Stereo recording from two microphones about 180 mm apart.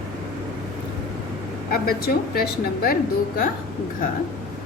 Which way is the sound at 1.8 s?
55° left (ahead or behind).